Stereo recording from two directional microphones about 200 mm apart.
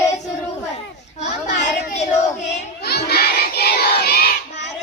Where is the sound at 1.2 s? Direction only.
35° left (ahead or behind).